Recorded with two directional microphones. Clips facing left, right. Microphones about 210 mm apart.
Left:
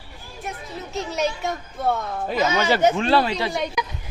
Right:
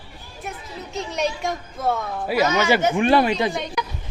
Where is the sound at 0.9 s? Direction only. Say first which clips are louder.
Even; 5° left (ahead or behind).